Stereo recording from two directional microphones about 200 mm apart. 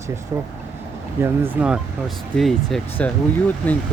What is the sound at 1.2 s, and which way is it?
Speech, 10° right (ahead or behind).